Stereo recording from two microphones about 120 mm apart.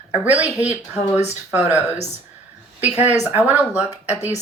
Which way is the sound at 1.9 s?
55° right (ahead or behind).